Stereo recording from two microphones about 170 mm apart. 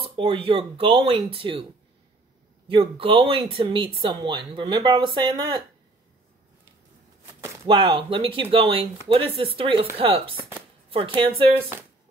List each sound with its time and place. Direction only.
0.0 s speech: 30° right (ahead or behind)
2.7 s speech: 30° right (ahead or behind)
7.6 s speech: 30° right (ahead or behind)